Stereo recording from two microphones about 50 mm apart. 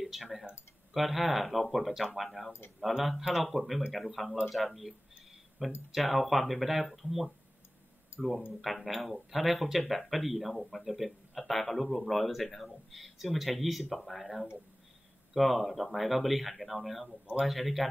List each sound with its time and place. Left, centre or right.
0.0 s speech: centre
8.1 s a sound: left
8.5 s speech: centre